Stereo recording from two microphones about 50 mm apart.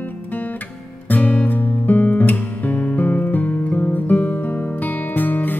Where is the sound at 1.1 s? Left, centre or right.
Left.